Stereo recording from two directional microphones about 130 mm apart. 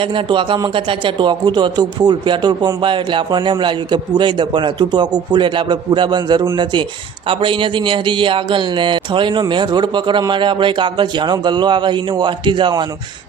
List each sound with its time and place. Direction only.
0.0 s speech: 40° right (ahead or behind)